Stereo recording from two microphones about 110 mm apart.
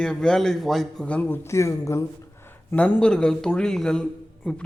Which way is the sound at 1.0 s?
15° left (ahead or behind).